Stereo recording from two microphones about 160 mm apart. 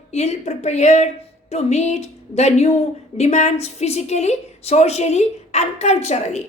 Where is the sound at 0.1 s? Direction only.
45° left (ahead or behind).